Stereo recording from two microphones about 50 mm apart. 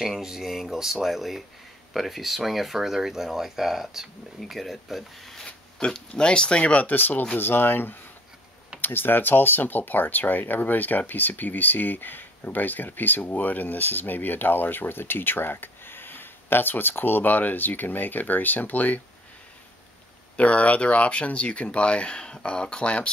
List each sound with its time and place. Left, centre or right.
0.0 s speech: centre
5.8 s speech: centre; by 18.9 s left
20.3 s speech: left